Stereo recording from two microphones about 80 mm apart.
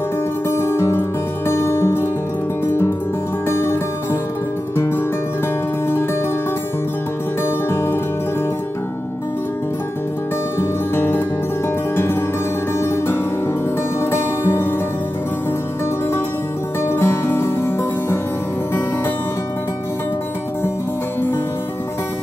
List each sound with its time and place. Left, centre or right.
0.5 s music: left
3.4 s music: left
7.4 s music: left
10.6 s music: left
12.8 s music: left
16.8 s music: left